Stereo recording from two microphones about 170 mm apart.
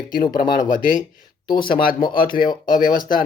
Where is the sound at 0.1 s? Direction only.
60° left (ahead or behind).